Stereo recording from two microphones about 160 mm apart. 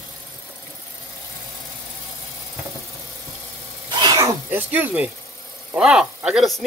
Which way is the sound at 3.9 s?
25° right (ahead or behind).